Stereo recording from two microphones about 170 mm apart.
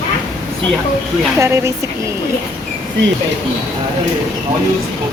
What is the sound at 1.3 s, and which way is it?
Speech, 15° right (ahead or behind).